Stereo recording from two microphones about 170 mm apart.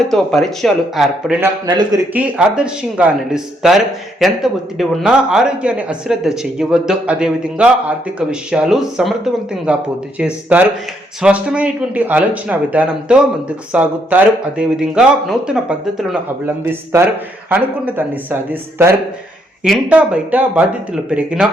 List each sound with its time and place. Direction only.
0.1 s speech: centre (ahead or behind)
1.4 s a man's voice: 20° right (ahead or behind)
2.1 s speech: 5° right (ahead or behind)
17.5 s speech: 10° right (ahead or behind)
19.6 s speech: 5° right (ahead or behind)